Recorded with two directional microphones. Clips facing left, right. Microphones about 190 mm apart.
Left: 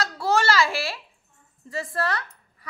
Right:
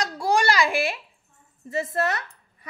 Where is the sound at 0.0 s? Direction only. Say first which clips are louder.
Right 1 dB; 15° right (ahead or behind).